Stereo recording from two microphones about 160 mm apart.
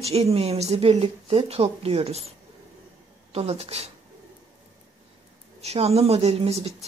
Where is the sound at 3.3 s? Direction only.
40° right (ahead or behind).